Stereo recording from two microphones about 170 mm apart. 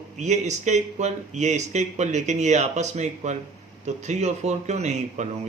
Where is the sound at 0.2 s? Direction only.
45° right (ahead or behind).